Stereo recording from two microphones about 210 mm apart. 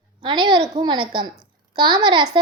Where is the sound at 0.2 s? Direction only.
20° right (ahead or behind).